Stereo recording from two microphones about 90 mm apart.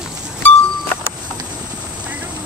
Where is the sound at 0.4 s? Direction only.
20° left (ahead or behind).